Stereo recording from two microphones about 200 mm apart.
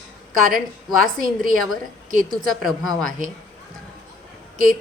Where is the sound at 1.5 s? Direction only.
90° left.